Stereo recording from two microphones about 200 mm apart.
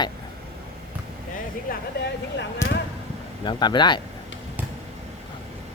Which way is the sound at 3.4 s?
20° left (ahead or behind).